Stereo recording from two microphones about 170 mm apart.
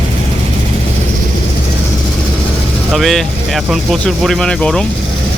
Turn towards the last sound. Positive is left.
turn(degrees=5)  # may be behind; listen again after turning